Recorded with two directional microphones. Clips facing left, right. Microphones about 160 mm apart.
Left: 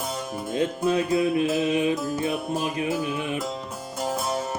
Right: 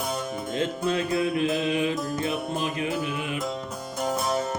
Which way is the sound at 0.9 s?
15° left (ahead or behind).